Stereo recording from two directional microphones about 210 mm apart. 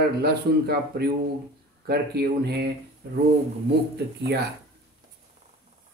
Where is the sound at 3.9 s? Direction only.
50° right (ahead or behind).